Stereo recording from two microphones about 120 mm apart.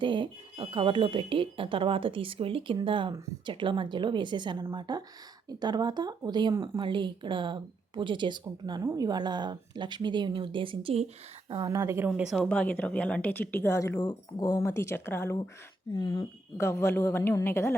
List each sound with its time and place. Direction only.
0.0 s speech: 40° right (ahead or behind)
11.4 s speech: 35° right (ahead or behind)
12.0 s a woman's voice: 10° right (ahead or behind)
12.5 s a woman's voice: 10° left (ahead or behind)
14.0 s speech: 40° left (ahead or behind); by 15.4 s 20° left (ahead or behind)
16.0 s speech: 35° left (ahead or behind)
16.6 s speech: 25° left (ahead or behind)